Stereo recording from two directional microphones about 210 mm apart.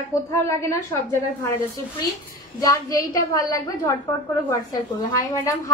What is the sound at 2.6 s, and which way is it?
A woman's voice, 15° left (ahead or behind).